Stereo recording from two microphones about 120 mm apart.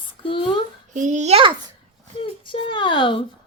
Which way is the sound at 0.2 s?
45° left (ahead or behind).